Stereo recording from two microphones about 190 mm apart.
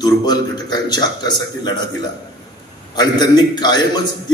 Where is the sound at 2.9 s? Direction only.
20° left (ahead or behind).